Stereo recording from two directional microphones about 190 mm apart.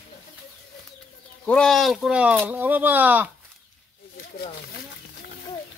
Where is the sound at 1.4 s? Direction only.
5° left (ahead or behind).